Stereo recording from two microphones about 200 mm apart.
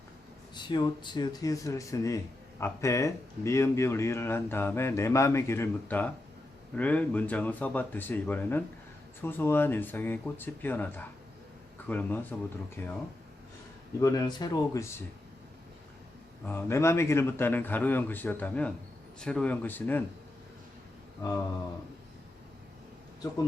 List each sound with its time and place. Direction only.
0.5 s speech: 20° left (ahead or behind)
14.0 s speech: 15° left (ahead or behind)
16.5 s speech: 10° left (ahead or behind)